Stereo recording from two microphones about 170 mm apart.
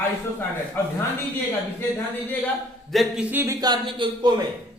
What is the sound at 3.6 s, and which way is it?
Speech, 25° right (ahead or behind).